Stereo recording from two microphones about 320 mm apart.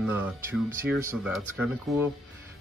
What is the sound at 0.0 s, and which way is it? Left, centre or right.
Speech, centre.